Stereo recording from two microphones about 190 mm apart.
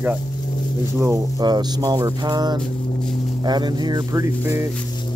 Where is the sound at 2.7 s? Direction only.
45° left (ahead or behind).